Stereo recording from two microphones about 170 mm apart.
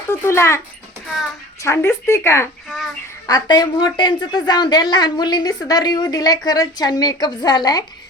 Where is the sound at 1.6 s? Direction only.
15° left (ahead or behind).